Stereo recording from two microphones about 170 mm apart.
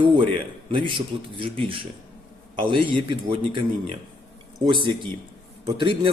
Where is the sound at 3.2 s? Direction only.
30° right (ahead or behind).